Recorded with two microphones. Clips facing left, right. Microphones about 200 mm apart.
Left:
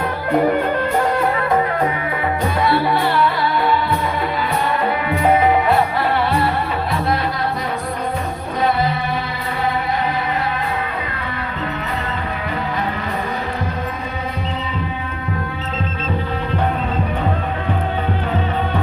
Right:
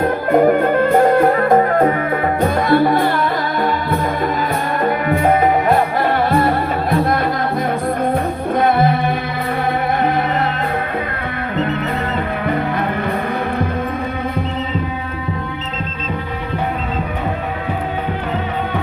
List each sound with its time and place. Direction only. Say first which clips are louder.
0.0 s music: right 4 dB; 45° right (ahead or behind)
8.5 s music: right 4 dB; 50° right (ahead or behind)